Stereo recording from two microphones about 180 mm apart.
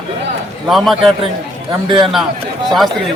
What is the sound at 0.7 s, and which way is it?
Speech, centre (ahead or behind).